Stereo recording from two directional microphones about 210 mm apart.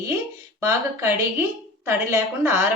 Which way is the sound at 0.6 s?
15° right (ahead or behind).